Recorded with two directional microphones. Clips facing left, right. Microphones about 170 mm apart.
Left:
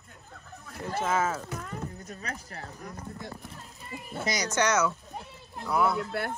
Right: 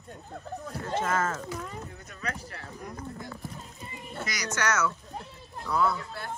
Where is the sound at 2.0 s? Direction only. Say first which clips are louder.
Right 2 dB; 40° left (ahead or behind).